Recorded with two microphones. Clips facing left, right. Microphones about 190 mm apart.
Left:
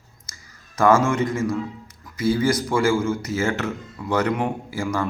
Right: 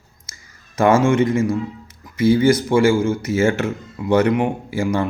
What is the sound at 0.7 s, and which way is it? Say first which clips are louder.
Speech: right 3 dB; 25° right (ahead or behind).